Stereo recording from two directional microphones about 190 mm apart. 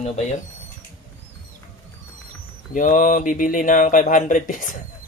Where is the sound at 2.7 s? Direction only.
45° left (ahead or behind).